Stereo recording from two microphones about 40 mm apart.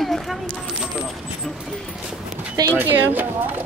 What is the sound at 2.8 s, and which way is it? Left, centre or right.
Speech, right.